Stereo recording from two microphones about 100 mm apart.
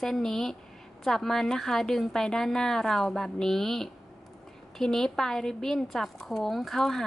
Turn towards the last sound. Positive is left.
turn(degrees=5)  # may be behind; listen again after turning